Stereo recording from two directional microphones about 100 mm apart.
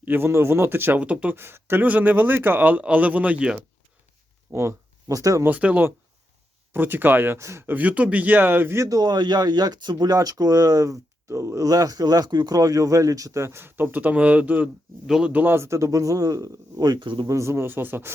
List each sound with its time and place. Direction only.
0.0 s speech: 20° right (ahead or behind)
4.5 s speech: 30° right (ahead or behind)
5.5 s a man's voice: 15° right (ahead or behind)
7.8 s a man's voice: 15° right (ahead or behind)
9.0 s speech: 45° right (ahead or behind); by 14.7 s 15° right (ahead or behind)
15.0 s speech: 5° right (ahead or behind)
15.3 s speech: 20° right (ahead or behind); by 17.2 s 55° right (ahead or behind)
17.2 s speech: 30° right (ahead or behind)